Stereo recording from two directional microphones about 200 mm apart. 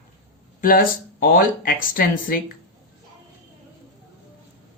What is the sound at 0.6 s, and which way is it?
Speech, 45° left (ahead or behind).